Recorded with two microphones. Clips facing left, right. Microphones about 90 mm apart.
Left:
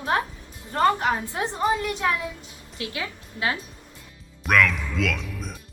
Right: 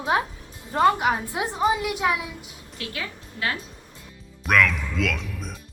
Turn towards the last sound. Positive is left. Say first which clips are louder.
# even
turn(degrees=0)  # may be behind; listen again after turning